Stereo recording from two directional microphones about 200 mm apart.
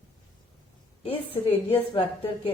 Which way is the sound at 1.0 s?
30° left (ahead or behind).